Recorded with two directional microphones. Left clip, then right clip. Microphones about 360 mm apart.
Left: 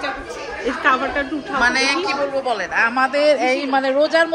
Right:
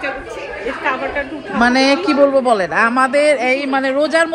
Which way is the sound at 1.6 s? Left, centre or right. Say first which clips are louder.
Right 4 dB; centre.